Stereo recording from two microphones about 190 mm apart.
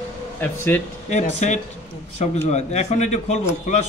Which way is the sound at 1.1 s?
40° left (ahead or behind).